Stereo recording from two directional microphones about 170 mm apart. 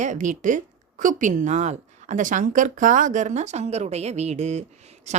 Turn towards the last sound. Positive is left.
turn(degrees=-40)  # may be behind; listen again after turning